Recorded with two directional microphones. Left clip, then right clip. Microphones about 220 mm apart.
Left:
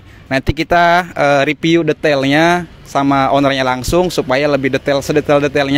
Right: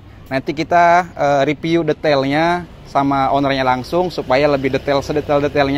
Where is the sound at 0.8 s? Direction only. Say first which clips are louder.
Even; 45° left (ahead or behind).